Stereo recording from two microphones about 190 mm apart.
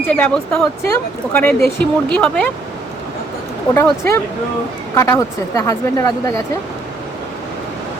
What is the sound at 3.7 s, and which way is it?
A woman's voice, 15° left (ahead or behind).